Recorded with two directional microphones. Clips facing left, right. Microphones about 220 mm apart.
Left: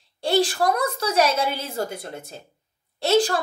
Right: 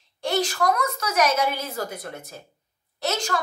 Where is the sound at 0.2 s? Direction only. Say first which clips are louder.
Left 3 dB; 30° left (ahead or behind).